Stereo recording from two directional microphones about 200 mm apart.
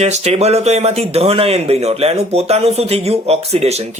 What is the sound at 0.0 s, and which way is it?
Speech, 30° right (ahead or behind).